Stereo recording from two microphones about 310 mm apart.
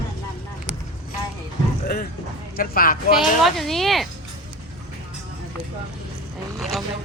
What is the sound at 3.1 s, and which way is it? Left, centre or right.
Speech, centre.